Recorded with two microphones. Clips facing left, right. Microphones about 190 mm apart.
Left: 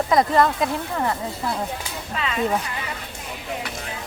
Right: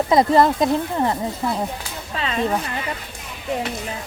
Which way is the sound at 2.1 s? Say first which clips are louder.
Right 2 dB; 35° right (ahead or behind).